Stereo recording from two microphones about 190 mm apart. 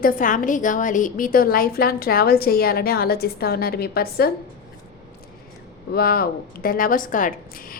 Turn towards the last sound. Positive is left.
turn(degrees=50)  # may be behind; listen again after turning